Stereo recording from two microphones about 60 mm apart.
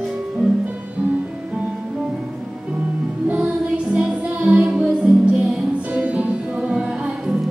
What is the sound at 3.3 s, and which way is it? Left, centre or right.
Music, centre.